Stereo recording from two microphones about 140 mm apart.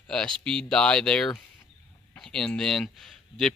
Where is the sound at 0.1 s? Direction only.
5° left (ahead or behind).